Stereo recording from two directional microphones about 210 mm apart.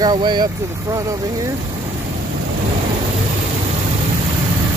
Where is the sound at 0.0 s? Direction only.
20° right (ahead or behind).